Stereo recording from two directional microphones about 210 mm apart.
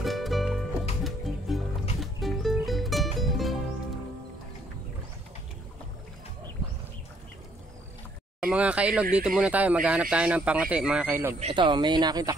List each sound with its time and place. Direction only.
0.0 s music: centre (ahead or behind)
8.4 s a sound: 5° right (ahead or behind)
9.1 s speech: 5° right (ahead or behind)
11.3 s speech: 25° right (ahead or behind)